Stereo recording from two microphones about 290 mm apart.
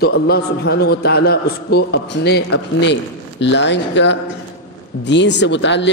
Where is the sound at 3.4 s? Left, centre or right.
Left.